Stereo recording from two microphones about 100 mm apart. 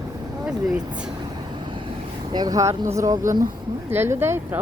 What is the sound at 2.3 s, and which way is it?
Speech, 40° right (ahead or behind).